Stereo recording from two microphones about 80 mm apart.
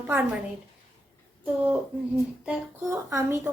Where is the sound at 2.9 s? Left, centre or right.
Right.